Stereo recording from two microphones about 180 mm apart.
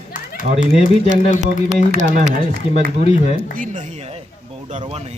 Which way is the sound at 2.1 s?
50° right (ahead or behind).